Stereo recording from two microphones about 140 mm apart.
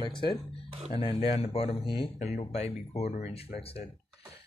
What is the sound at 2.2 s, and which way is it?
Speech, 50° left (ahead or behind).